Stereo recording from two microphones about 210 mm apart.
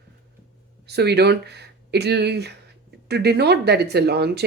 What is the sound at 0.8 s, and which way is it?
Speech, 50° right (ahead or behind).